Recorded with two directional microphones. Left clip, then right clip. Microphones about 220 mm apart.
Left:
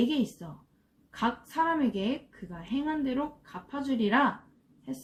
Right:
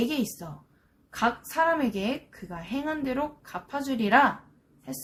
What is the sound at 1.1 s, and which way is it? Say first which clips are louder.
A woman's voice: right 4 dB; 35° right (ahead or behind).